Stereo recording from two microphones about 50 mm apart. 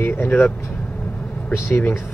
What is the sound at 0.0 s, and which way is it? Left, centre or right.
Speech, left.